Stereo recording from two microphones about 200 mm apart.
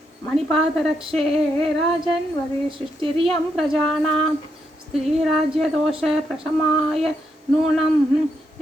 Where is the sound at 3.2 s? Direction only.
Centre (ahead or behind).